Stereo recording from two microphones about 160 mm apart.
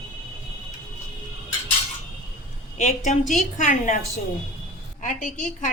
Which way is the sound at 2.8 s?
50° left (ahead or behind).